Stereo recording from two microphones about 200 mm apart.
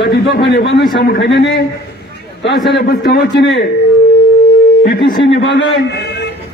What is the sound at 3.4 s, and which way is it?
Speech, 60° left (ahead or behind).